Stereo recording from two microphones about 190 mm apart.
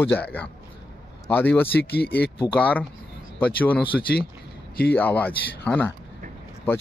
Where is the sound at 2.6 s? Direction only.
10° left (ahead or behind).